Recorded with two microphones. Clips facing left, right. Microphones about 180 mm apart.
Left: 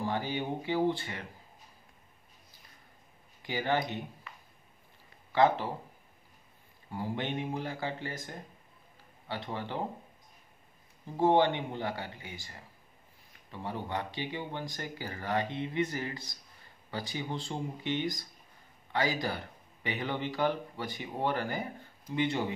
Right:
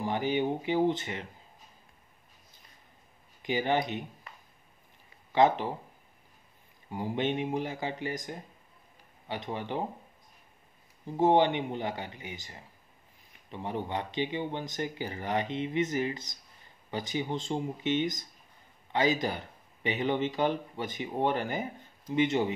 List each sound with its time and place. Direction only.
0.0 s speech: 20° right (ahead or behind)
3.4 s speech: 20° right (ahead or behind)
5.3 s speech: 20° right (ahead or behind)
6.9 s speech: 20° right (ahead or behind)
11.1 s speech: 20° right (ahead or behind)